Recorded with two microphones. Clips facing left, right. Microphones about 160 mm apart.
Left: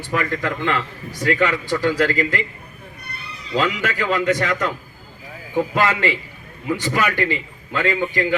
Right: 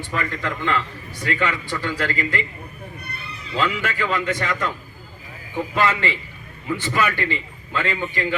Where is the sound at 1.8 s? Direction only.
40° left (ahead or behind).